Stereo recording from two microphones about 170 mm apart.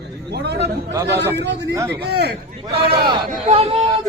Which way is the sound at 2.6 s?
30° right (ahead or behind).